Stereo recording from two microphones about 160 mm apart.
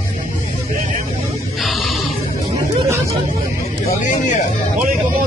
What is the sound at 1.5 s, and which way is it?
Music, centre (ahead or behind).